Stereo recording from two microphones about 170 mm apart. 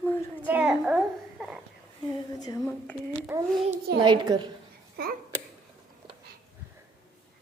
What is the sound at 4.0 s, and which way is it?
Speech, 25° right (ahead or behind).